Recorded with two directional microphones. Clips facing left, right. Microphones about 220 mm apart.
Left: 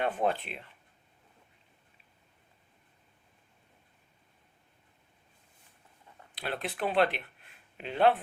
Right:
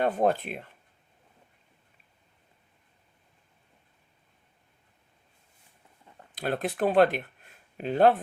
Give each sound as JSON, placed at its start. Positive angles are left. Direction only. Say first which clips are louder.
{"t": 0.0, "sound": "speech", "louder": "right 5 dB", "side_deg": -40}
{"t": 6.1, "sound": "speech", "louder": "right 7 dB", "side_deg": -45}